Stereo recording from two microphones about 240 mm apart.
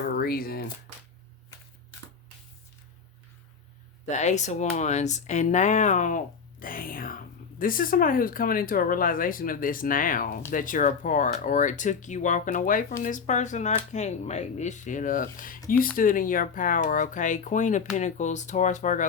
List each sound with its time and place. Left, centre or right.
0.2 s speech: left
4.0 s speech: left